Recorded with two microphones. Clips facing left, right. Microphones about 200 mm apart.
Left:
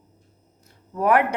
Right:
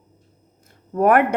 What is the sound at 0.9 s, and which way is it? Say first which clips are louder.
Speech: right 4 dB; 55° right (ahead or behind).